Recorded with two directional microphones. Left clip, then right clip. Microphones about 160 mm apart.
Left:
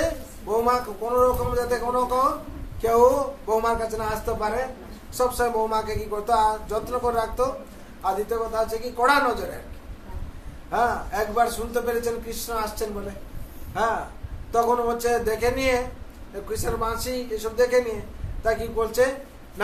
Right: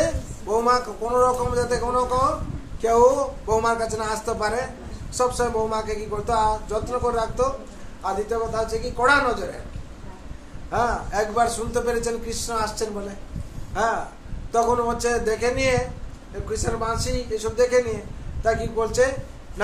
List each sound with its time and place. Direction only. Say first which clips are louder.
0.0 s a man's voice: right 2 dB; 10° right (ahead or behind)
5.1 s a man's voice: right 1 dB; 10° right (ahead or behind)
10.7 s a man's voice: even; 5° right (ahead or behind)